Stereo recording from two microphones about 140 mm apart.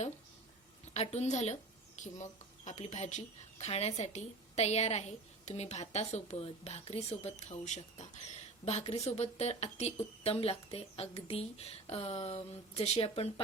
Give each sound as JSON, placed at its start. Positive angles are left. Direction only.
{"t": 0.9, "sound": "a woman's voice", "side_deg": 50}